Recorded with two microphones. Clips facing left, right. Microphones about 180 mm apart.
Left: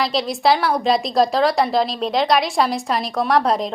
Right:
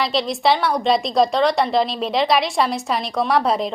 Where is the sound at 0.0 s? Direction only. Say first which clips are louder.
Even; centre (ahead or behind).